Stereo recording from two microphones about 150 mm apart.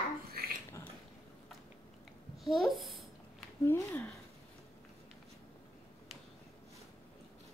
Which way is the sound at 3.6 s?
15° left (ahead or behind).